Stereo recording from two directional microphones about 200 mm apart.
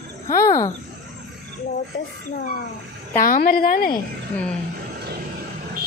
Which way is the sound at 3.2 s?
45° left (ahead or behind).